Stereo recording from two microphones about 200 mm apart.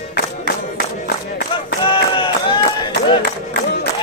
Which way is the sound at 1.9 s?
25° left (ahead or behind).